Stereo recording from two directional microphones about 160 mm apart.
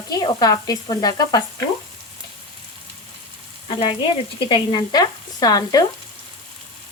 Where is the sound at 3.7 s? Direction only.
35° left (ahead or behind).